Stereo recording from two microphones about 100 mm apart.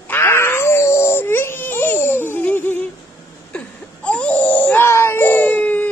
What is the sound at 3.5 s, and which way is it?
Wail, 10° left (ahead or behind).